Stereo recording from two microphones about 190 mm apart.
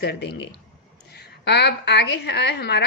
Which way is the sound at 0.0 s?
60° left (ahead or behind).